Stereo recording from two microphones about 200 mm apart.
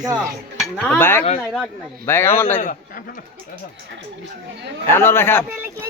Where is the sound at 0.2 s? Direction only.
5° right (ahead or behind).